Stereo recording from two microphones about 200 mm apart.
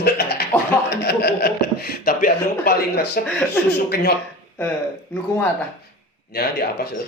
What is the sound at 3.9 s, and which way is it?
Speech, 50° left (ahead or behind).